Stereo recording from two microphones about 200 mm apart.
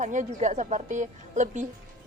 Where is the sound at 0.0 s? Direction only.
40° right (ahead or behind).